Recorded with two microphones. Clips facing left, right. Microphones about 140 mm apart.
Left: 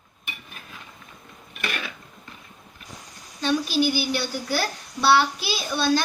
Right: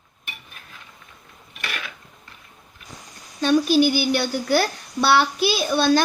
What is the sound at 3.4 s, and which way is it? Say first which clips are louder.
A child's voice: right 5 dB; 50° right (ahead or behind).